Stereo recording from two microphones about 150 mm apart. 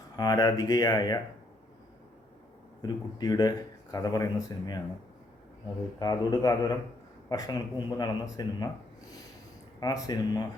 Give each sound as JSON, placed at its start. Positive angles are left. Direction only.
{"t": 0.2, "sound": "speech", "side_deg": 25}
{"t": 2.8, "sound": "speech", "side_deg": 25}
{"t": 6.0, "sound": "speech", "side_deg": 25}
{"t": 9.8, "sound": "speech", "side_deg": 25}